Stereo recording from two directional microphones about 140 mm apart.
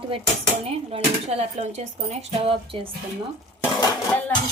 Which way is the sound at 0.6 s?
45° right (ahead or behind).